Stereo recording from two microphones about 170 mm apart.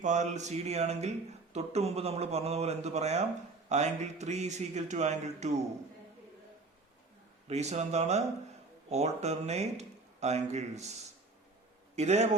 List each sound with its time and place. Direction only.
0.0 s a man's voice: 45° right (ahead or behind)
7.4 s speech: 40° right (ahead or behind)